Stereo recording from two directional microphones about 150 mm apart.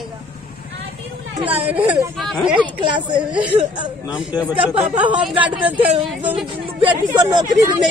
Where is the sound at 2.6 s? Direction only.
30° right (ahead or behind).